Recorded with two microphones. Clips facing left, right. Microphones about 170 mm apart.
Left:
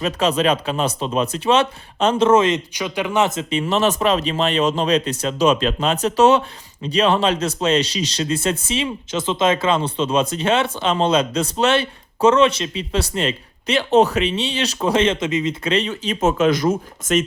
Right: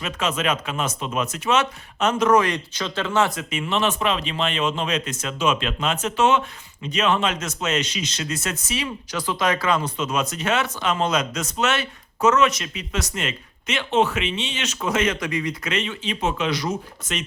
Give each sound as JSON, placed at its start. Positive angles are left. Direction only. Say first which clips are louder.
{"t": 0.0, "sound": "speech", "louder": "left 6 dB", "side_deg": 35}
{"t": 3.6, "sound": "speech", "louder": "left 4 dB", "side_deg": 40}